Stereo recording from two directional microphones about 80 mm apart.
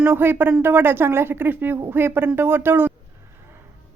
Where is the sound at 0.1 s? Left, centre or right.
Right.